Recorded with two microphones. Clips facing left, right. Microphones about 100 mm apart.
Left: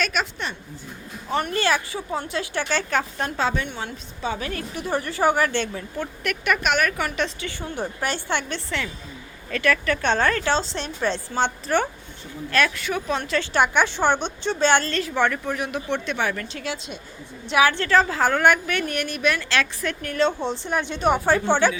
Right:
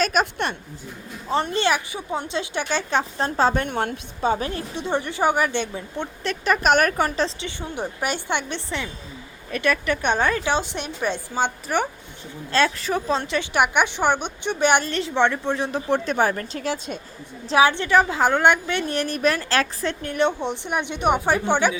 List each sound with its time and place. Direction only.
0.0 s a woman's voice: 40° right (ahead or behind)
1.3 s a woman's voice: 25° right (ahead or behind)
3.2 s a woman's voice: 35° right (ahead or behind)
7.4 s a woman's voice: 15° right (ahead or behind)
12.5 s a woman's voice: 25° right (ahead or behind)
17.7 s a woman's voice: 20° right (ahead or behind)